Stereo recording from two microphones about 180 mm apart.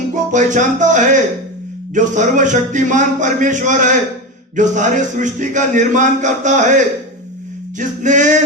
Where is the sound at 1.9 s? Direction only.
45° right (ahead or behind).